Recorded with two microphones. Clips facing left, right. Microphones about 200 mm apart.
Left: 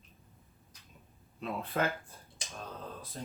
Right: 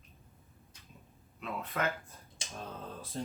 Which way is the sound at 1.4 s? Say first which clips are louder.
Left 2 dB; 30° left (ahead or behind).